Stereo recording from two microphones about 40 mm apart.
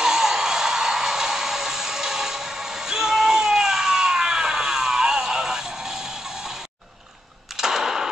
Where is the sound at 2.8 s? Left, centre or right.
Centre.